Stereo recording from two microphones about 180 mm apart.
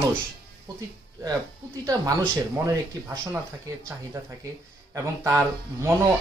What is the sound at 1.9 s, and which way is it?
Speech, 20° right (ahead or behind).